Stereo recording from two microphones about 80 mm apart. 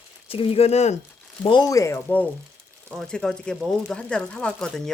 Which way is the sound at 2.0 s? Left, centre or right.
Left.